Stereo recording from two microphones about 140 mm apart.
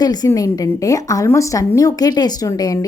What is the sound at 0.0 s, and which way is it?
A woman's voice, 30° left (ahead or behind).